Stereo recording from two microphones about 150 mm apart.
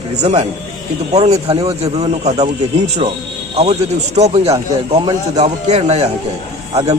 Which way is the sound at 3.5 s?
45° right (ahead or behind).